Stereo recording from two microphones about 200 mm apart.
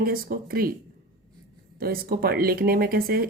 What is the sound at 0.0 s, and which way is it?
Speech, 50° right (ahead or behind).